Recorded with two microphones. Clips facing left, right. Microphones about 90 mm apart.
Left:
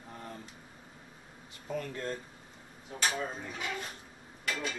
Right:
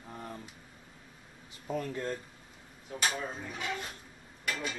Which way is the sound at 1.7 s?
20° right (ahead or behind).